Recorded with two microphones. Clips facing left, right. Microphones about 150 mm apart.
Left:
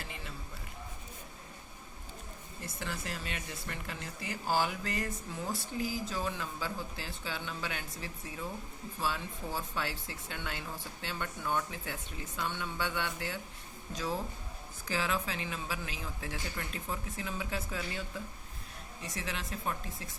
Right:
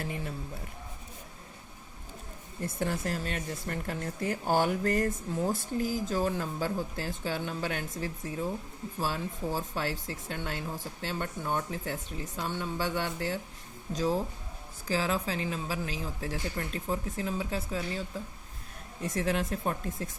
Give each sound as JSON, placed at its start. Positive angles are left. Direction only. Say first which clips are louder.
{"t": 0.0, "sound": "speech", "louder": "right 9 dB", "side_deg": -50}
{"t": 2.6, "sound": "speech", "louder": "right 9 dB", "side_deg": -50}
{"t": 19.0, "sound": "speech", "louder": "right 10 dB", "side_deg": -50}